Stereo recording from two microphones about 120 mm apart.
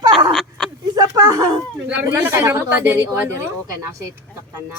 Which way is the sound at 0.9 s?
30° right (ahead or behind).